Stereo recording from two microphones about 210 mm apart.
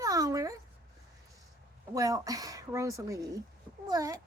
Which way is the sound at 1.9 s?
15° right (ahead or behind).